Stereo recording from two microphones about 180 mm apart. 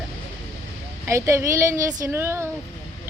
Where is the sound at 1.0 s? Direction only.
15° right (ahead or behind).